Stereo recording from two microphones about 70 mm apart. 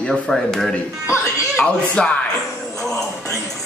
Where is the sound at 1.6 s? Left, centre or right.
Centre.